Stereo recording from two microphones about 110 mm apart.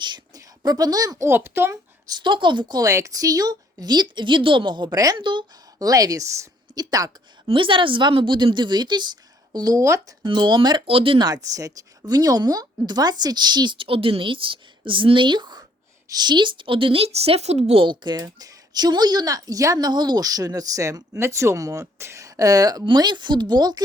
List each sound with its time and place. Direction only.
0.0 s a sound: 40° right (ahead or behind)
1.3 s speech: 20° right (ahead or behind)
2.0 s speech: 45° right (ahead or behind)
5.1 s a woman's voice: 45° right (ahead or behind)
5.9 s speech: 35° right (ahead or behind)
7.4 s speech: 50° right (ahead or behind); by 10.2 s 30° right (ahead or behind)
10.2 s speech: 45° right (ahead or behind)
10.8 s speech: 55° right (ahead or behind)
11.5 s a woman's voice: 30° right (ahead or behind); by 17.8 s 70° right (ahead or behind)
17.8 s speech: 40° right (ahead or behind)